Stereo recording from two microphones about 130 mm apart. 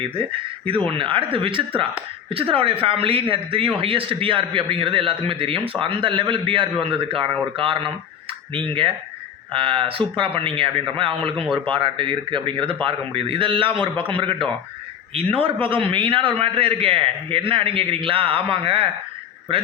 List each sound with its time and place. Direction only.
0.0 s a man's voice: 45° right (ahead or behind)